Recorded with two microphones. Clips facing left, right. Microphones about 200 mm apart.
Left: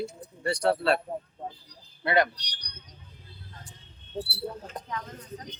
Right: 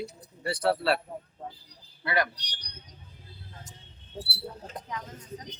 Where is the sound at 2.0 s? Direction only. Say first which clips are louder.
Left 4 dB; 25° left (ahead or behind).